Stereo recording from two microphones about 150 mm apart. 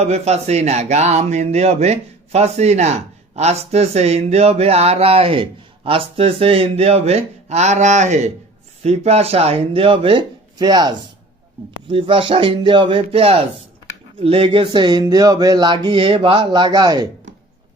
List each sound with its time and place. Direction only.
0.0 s speech: 45° right (ahead or behind); by 17.1 s 25° right (ahead or behind)